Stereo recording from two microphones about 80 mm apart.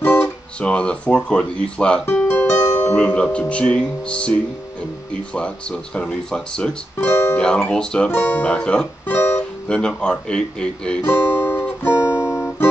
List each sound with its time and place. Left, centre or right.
0.0 s guitar: left
0.6 s speech: centre
2.2 s music: left
3.0 s speech: centre
7.0 s music: left
7.3 s speech: centre
8.1 s speech: left
9.0 s music: left
9.4 s speech: centre
11.0 s guitar: left